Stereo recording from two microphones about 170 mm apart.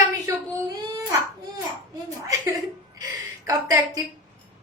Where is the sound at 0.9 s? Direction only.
25° right (ahead or behind).